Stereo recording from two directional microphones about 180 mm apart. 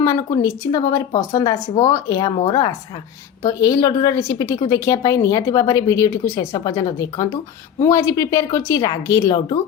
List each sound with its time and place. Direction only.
0.0 s speech: 20° left (ahead or behind)